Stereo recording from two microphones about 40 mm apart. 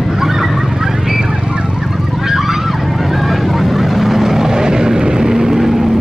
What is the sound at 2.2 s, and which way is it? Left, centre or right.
Honk, centre.